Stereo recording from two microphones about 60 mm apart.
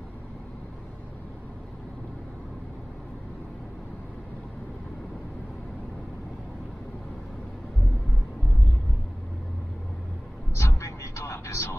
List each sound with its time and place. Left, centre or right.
10.6 s music: left